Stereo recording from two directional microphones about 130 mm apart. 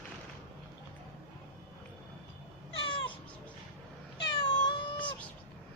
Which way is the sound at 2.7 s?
40° left (ahead or behind).